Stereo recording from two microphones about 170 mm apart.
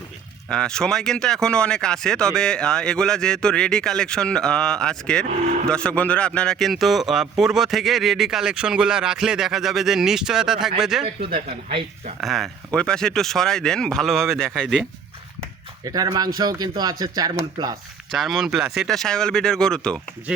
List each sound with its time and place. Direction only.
0.4 s a man's voice: 5° left (ahead or behind)
11.0 s speech: 30° right (ahead or behind)
12.2 s a man's voice: centre (ahead or behind)
15.8 s speech: 20° right (ahead or behind)
18.1 s a man's voice: centre (ahead or behind)